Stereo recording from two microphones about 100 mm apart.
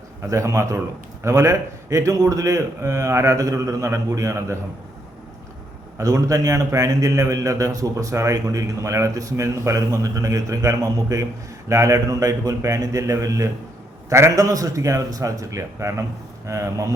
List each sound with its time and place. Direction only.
0.2 s a man's voice: 30° right (ahead or behind)
6.0 s a man's voice: 35° right (ahead or behind)